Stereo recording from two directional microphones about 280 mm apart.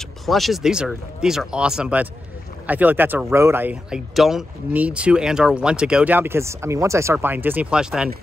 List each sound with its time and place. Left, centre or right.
0.3 s speech: centre